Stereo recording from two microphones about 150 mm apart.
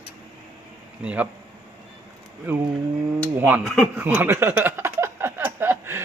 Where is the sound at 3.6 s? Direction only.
Centre (ahead or behind).